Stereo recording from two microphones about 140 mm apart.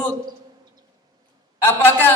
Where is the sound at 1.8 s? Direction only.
15° left (ahead or behind).